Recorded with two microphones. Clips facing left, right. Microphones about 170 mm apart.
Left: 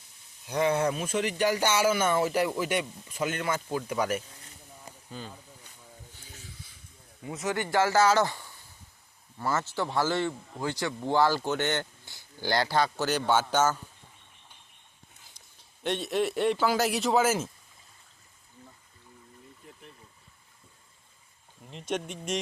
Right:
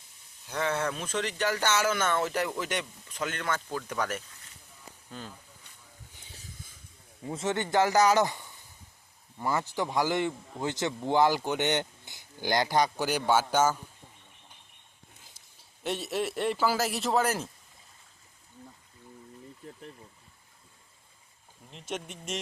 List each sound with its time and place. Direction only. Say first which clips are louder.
0.4 s speech: left 4 dB; 15° left (ahead or behind)
5.1 s a man's voice: left 1 dB; centre (ahead or behind)
6.3 s a sound: right 1 dB; 45° right (ahead or behind)
7.3 s speech: right 1 dB; 25° right (ahead or behind); by 13.7 s 10° right (ahead or behind)
15.8 s a man's voice: left 3 dB; 5° right (ahead or behind)
21.7 s a man's voice: left 5 dB; centre (ahead or behind)